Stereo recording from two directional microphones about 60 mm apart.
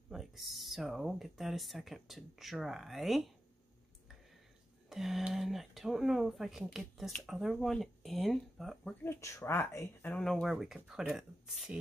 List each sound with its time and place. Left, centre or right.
0.1 s speech: centre
4.8 s speech: centre
9.0 s speech: left
10.1 s speech: centre
10.4 s speech: centre